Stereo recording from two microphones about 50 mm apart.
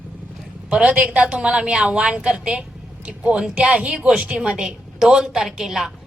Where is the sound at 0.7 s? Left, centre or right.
Right.